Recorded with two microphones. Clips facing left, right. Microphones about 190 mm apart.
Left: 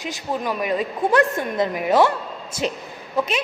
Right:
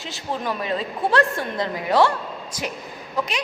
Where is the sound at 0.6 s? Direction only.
15° left (ahead or behind).